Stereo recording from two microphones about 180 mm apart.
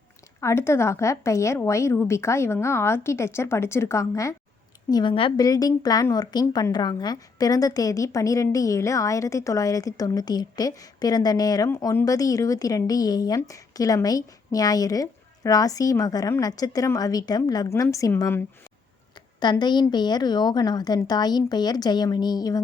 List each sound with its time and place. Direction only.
0.3 s a woman's voice: 15° left (ahead or behind)
19.4 s a woman's voice: 25° left (ahead or behind)